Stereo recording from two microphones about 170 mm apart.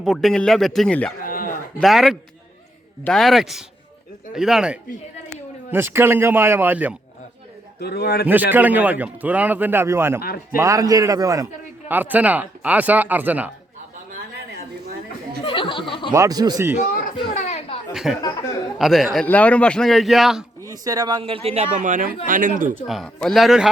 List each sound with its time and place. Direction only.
0.0 s speech: centre (ahead or behind)
1.2 s a sound: 55° left (ahead or behind)
1.8 s a man's voice: centre (ahead or behind)
7.8 s a man's voice: 70° left (ahead or behind)
8.3 s a man's voice: 10° right (ahead or behind)
10.2 s speech: 65° left (ahead or behind)
10.6 s a man's voice: 20° right (ahead or behind)
15.4 s a sound: 30° left (ahead or behind)
16.1 s a man's voice: 20° right (ahead or behind)
16.9 s a sound: 55° left (ahead or behind)
17.9 s speech: centre (ahead or behind)
20.7 s a man's voice: 20° right (ahead or behind); by 22.7 s 55° right (ahead or behind)
22.9 s speech: centre (ahead or behind)